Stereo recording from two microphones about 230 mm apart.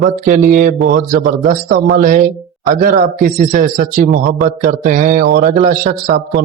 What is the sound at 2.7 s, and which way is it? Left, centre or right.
Mantra, right.